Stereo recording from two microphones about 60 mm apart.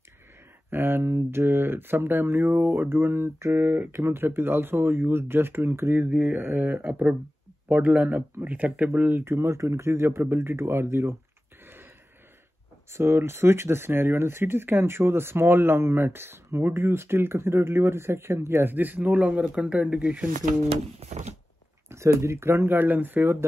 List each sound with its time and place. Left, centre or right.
0.7 s speech: right
3.5 s speech: right
3.9 s speech: right
6.0 s speech: centre
6.3 s speech: right
9.2 s speech: right
12.9 s speech: right
18.7 s speech: right
21.9 s speech: right
22.8 s speech: right